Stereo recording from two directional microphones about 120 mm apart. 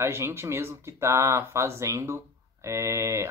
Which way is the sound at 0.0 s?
20° right (ahead or behind).